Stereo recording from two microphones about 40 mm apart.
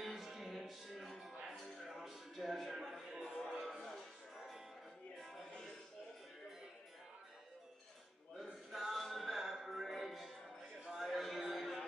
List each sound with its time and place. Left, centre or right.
0.0 s music: centre
8.7 s music: centre
10.9 s a sound: centre